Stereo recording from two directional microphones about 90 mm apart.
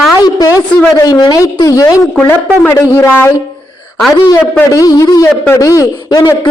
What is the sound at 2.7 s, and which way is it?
Speech, 25° left (ahead or behind).